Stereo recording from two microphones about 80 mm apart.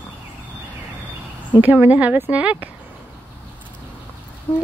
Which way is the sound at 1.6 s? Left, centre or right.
Right.